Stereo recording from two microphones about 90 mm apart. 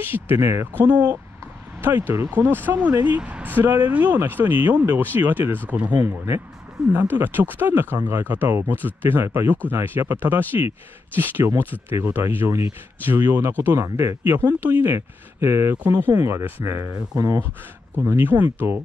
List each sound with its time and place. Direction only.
0.0 s speech: 25° right (ahead or behind)
6.0 s speech: 30° right (ahead or behind)